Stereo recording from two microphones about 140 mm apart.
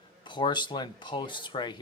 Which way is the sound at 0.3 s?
35° left (ahead or behind).